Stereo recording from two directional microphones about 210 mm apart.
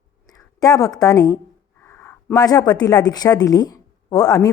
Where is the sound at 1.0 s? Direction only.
15° left (ahead or behind).